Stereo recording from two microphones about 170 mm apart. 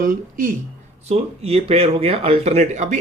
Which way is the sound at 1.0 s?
40° right (ahead or behind).